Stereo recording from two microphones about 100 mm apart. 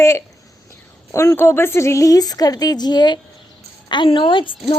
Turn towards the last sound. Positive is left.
turn(degrees=55)  # may be behind; listen again after turning